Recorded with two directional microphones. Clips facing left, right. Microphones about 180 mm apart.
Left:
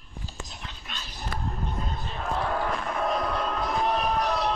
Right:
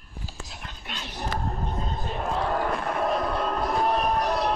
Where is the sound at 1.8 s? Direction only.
35° right (ahead or behind).